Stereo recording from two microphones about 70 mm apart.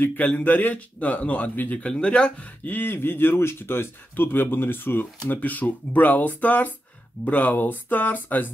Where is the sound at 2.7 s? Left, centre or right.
Left.